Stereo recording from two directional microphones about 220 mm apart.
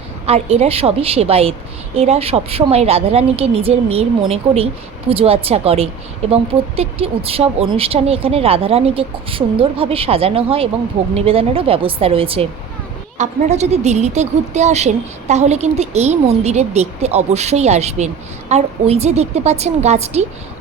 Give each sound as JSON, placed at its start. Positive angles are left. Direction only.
{"t": 0.3, "sound": "a woman's voice", "side_deg": -30}